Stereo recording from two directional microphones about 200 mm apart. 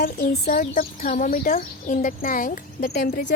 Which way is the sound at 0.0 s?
50° left (ahead or behind).